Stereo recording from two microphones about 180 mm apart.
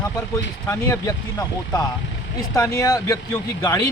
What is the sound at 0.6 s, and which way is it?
A man's voice, 20° left (ahead or behind).